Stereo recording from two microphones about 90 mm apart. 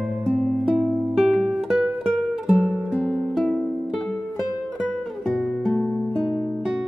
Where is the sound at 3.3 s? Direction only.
5° left (ahead or behind).